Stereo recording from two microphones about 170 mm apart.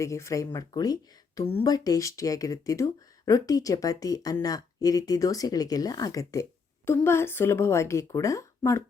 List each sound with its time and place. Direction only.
0.0 s speech: 15° left (ahead or behind)